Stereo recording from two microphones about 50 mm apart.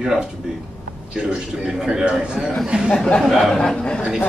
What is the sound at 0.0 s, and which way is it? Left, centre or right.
A man's voice, centre.